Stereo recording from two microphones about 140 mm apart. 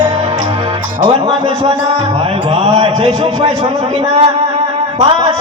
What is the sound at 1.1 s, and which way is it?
A man's voice, 40° right (ahead or behind).